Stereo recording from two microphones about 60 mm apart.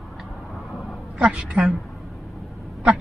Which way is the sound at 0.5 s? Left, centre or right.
Centre.